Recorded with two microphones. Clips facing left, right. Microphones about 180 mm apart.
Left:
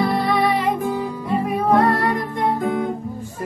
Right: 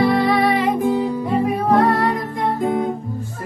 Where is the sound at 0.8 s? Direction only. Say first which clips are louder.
Right 5 dB; 15° right (ahead or behind).